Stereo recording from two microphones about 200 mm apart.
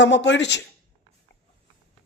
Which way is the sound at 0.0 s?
65° left (ahead or behind).